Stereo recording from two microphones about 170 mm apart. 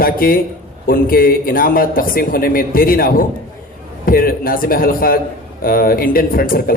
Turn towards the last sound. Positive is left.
turn(degrees=60)  # may be behind; listen again after turning